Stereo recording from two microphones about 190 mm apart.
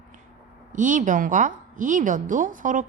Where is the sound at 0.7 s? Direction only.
40° right (ahead or behind).